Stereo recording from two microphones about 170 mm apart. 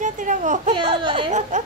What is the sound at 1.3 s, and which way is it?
Speech, 45° right (ahead or behind).